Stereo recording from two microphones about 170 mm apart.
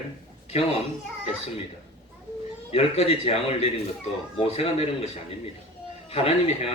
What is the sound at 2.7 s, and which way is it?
A man's voice, 35° left (ahead or behind).